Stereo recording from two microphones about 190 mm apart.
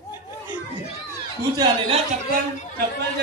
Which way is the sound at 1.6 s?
30° right (ahead or behind).